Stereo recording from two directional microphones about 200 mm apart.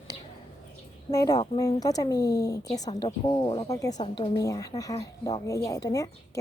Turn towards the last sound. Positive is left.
turn(degrees=20)  # may be behind; listen again after turning